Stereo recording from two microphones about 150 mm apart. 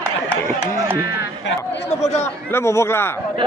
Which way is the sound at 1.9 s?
45° left (ahead or behind).